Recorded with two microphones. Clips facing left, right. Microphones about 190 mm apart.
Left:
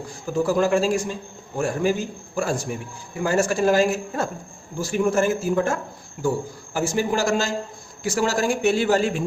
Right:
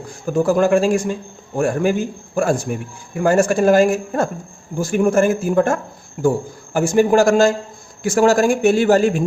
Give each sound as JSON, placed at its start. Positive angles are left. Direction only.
{"t": 0.3, "sound": "a man's voice", "side_deg": -55}